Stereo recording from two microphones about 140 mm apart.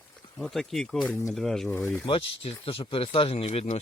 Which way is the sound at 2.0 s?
40° left (ahead or behind).